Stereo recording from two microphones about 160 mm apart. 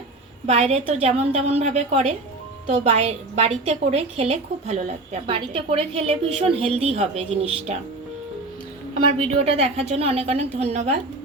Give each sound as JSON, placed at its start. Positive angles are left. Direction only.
{"t": 0.4, "sound": "a woman's voice", "side_deg": -40}
{"t": 5.2, "sound": "a woman's voice", "side_deg": -30}
{"t": 9.1, "sound": "a woman's voice", "side_deg": -40}